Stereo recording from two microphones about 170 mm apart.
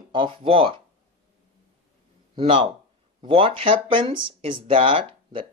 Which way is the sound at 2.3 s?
30° right (ahead or behind).